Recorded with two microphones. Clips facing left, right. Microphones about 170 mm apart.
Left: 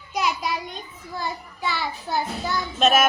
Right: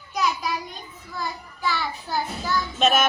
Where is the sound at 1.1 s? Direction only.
20° left (ahead or behind).